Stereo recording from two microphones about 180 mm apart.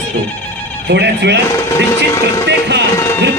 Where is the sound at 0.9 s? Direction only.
70° right (ahead or behind).